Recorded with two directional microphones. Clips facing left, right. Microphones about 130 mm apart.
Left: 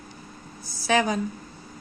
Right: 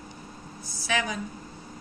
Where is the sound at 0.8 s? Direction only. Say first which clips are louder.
Left 7 dB; 40° left (ahead or behind).